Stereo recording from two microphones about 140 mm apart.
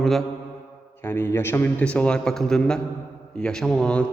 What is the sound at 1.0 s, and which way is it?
A man's voice, 15° left (ahead or behind).